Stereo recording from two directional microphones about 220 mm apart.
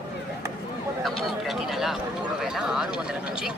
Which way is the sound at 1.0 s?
Centre (ahead or behind).